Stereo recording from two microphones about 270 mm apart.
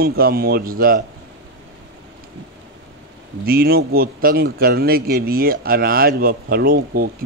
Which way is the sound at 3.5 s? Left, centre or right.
Right.